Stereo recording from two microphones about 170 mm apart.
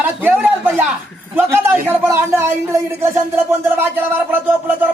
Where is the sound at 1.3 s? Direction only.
10° right (ahead or behind).